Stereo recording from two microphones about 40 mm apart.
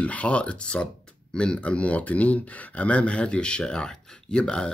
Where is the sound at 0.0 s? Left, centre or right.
Left.